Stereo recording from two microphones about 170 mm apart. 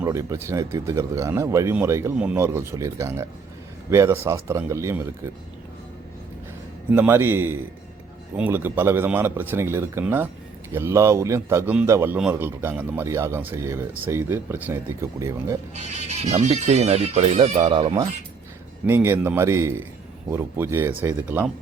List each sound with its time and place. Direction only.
0.0 s speech: 15° right (ahead or behind)
6.9 s speech: 15° right (ahead or behind)
16.0 s speech: 40° right (ahead or behind)
18.9 s speech: 10° right (ahead or behind)